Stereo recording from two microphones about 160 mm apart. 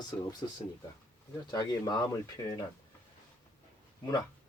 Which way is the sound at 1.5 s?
20° left (ahead or behind).